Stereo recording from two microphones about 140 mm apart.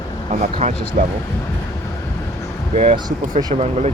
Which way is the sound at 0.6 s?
50° right (ahead or behind).